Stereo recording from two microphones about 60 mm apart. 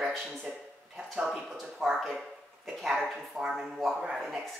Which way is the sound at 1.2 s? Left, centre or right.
Centre.